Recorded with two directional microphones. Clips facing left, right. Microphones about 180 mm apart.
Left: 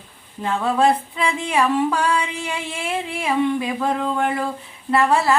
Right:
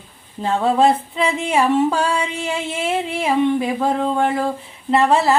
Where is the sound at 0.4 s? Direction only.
25° right (ahead or behind).